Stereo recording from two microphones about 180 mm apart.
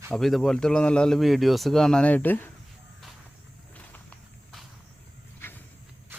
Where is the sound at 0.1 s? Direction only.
Centre (ahead or behind).